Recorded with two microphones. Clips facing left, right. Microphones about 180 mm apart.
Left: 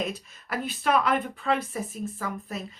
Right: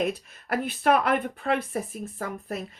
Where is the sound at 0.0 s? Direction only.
55° right (ahead or behind).